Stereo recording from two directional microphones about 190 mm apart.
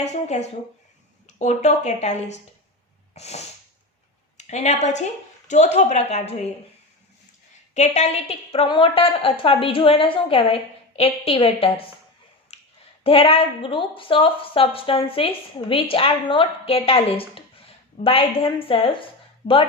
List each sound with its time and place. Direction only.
0.0 s speech: 35° left (ahead or behind)
7.7 s a woman's voice: 35° left (ahead or behind)
12.5 s a sound: 35° left (ahead or behind)
13.1 s a woman's voice: 30° left (ahead or behind)